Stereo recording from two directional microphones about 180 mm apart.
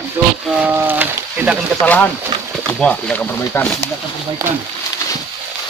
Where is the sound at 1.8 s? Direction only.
10° left (ahead or behind).